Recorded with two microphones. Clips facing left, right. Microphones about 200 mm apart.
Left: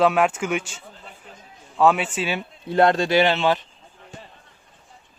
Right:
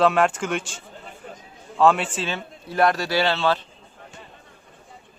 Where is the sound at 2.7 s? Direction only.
25° left (ahead or behind).